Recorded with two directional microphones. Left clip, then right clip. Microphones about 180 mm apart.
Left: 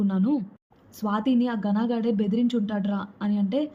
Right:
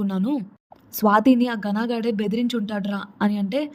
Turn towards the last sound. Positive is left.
turn(degrees=-45)  # may be behind; listen again after turning